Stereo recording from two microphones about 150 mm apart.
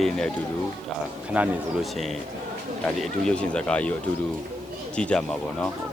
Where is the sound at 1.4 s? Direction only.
10° right (ahead or behind).